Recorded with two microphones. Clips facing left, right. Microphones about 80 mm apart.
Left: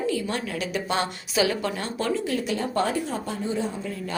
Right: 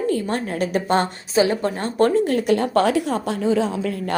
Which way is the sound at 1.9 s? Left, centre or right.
Right.